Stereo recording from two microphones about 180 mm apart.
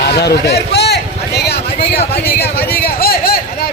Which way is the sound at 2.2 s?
60° left (ahead or behind).